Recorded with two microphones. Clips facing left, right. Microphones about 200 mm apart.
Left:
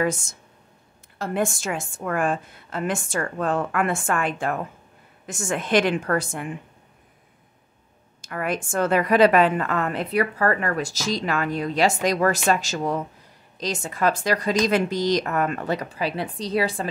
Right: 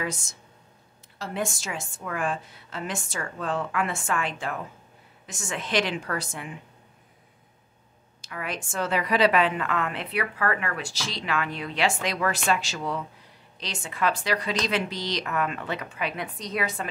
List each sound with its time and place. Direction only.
0.0 s a woman's voice: 50° left (ahead or behind)
8.2 s a woman's voice: 50° left (ahead or behind); by 16.9 s 30° left (ahead or behind)